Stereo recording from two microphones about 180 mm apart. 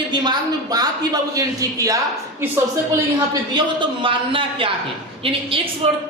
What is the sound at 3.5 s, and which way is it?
Music, 25° right (ahead or behind).